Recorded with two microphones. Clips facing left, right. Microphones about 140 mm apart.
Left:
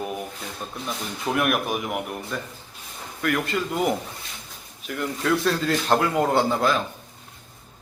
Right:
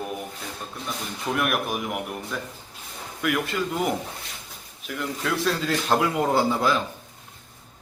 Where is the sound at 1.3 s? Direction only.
Centre (ahead or behind).